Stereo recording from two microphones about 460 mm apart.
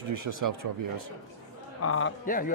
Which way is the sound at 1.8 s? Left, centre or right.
Left.